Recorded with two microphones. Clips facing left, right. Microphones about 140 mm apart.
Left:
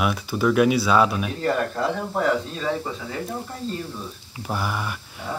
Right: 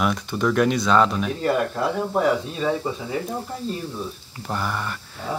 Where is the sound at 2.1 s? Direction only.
15° right (ahead or behind).